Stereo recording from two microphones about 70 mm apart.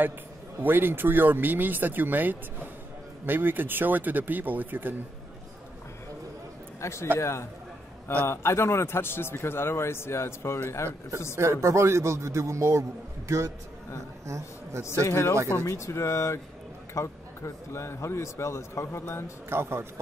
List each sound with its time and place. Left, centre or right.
0.6 s speech: right
6.8 s a man's voice: left
11.3 s a man's voice: right
14.2 s a man's voice: right
14.9 s a man's voice: left
19.5 s a man's voice: right